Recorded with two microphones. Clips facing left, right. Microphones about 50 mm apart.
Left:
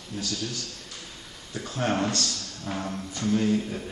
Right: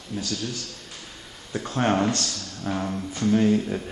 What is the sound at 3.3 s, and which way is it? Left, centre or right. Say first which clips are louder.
Speech: right 4 dB; centre.